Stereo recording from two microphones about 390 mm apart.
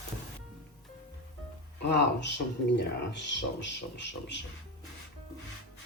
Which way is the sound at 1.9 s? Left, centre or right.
Left.